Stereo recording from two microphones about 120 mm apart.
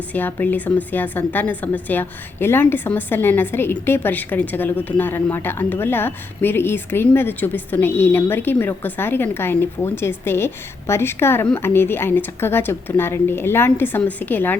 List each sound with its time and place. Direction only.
0.1 s a woman's voice: 15° left (ahead or behind)